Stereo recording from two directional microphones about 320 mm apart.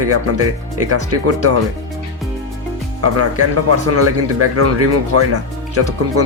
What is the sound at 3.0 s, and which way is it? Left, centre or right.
Speech, right.